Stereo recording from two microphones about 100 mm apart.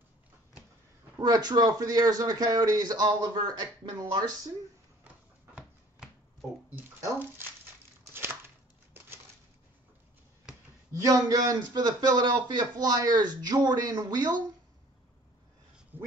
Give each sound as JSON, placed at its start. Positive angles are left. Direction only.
{"t": 1.2, "sound": "speech", "side_deg": -45}
{"t": 5.5, "sound": "a sound", "side_deg": -15}
{"t": 11.0, "sound": "speech", "side_deg": -35}
{"t": 15.9, "sound": "speech", "side_deg": -20}